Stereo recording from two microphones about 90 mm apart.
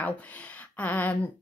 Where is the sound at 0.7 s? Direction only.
15° left (ahead or behind).